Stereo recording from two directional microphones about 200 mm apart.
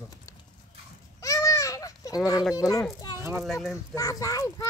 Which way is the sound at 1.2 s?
15° left (ahead or behind).